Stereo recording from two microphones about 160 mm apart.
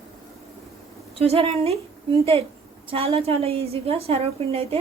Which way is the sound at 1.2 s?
40° right (ahead or behind).